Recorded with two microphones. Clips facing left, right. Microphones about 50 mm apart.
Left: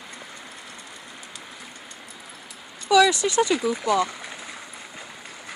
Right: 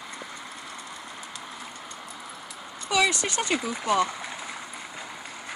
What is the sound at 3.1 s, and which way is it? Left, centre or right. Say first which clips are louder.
Speech: left 6 dB; right.